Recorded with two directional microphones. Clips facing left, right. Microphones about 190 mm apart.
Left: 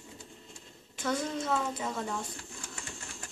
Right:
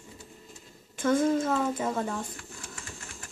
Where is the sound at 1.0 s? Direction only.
50° right (ahead or behind).